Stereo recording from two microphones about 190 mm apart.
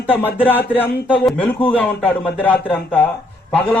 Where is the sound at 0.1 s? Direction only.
10° left (ahead or behind).